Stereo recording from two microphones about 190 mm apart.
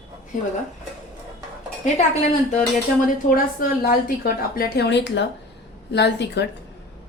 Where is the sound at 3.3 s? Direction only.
45° left (ahead or behind); by 6.5 s 60° left (ahead or behind).